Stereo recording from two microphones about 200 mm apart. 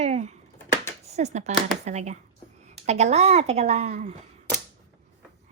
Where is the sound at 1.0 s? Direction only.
35° right (ahead or behind).